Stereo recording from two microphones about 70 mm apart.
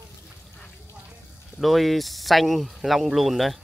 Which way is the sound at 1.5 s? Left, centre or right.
Centre.